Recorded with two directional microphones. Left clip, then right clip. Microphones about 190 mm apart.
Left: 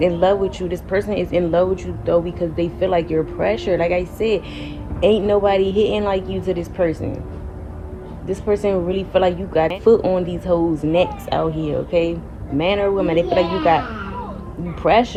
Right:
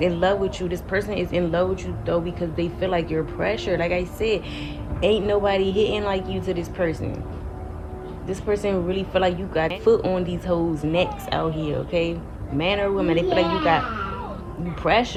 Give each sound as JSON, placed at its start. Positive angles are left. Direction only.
{"t": 0.0, "sound": "speech", "side_deg": 40}
{"t": 8.3, "sound": "speech", "side_deg": 40}
{"t": 14.8, "sound": "speech", "side_deg": 35}